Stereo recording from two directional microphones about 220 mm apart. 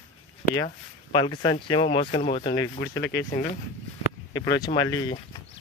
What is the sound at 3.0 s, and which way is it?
Speech, 45° left (ahead or behind).